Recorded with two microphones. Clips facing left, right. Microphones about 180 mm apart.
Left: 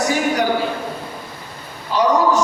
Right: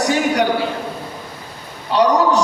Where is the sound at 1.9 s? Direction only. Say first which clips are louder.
Right 1 dB; 70° right (ahead or behind).